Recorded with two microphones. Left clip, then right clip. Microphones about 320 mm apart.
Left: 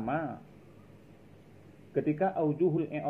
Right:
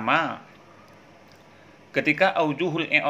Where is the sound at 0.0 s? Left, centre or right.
Right.